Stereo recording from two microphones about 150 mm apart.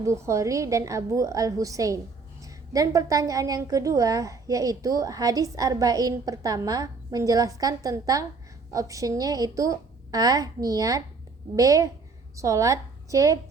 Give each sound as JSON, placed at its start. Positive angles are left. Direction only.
{"t": 0.0, "sound": "a woman's voice", "side_deg": -20}